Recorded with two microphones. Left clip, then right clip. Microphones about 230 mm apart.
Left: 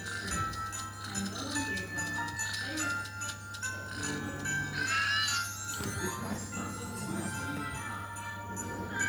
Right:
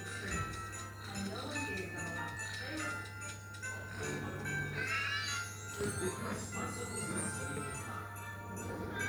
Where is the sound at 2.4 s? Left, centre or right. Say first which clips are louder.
Left 6 dB; centre.